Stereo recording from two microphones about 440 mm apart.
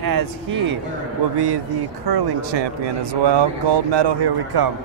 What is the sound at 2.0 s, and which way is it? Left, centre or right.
Speech, right.